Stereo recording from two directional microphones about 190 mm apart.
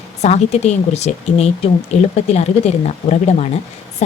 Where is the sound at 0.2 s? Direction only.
35° left (ahead or behind).